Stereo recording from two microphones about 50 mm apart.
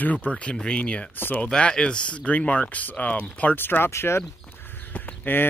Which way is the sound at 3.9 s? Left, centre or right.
Left.